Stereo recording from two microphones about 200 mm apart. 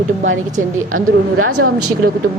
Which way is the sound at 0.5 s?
40° right (ahead or behind).